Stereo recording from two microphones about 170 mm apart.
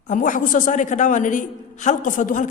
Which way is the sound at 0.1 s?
50° left (ahead or behind).